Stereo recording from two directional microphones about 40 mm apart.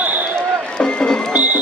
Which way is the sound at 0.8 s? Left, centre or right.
Left.